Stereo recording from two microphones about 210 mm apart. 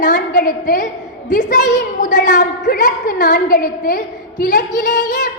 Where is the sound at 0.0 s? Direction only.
40° left (ahead or behind).